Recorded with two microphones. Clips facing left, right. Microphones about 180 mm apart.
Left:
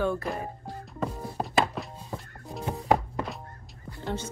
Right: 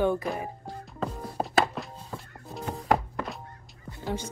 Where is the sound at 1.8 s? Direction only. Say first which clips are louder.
Even; centre (ahead or behind).